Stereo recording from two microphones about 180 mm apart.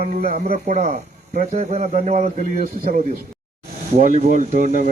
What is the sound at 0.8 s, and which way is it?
A man's voice, 40° right (ahead or behind).